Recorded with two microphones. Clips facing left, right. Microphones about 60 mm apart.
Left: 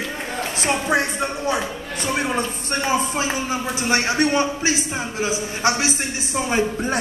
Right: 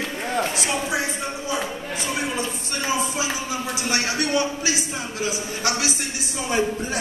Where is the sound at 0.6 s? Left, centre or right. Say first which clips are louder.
Left 4 dB; left.